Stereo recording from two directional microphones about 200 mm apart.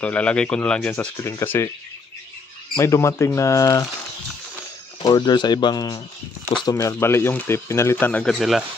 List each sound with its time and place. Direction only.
0.0 s speech: 5° left (ahead or behind)
2.7 s speech: 15° left (ahead or behind)
5.0 s speech: 20° left (ahead or behind); by 8.6 s centre (ahead or behind)